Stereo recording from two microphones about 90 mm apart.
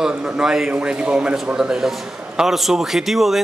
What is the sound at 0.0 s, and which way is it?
A man's voice, 10° right (ahead or behind).